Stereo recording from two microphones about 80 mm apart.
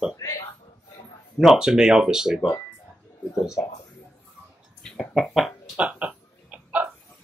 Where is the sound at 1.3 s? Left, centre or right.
Centre.